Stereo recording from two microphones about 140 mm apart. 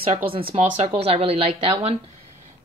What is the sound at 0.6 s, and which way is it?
Speech, 50° right (ahead or behind).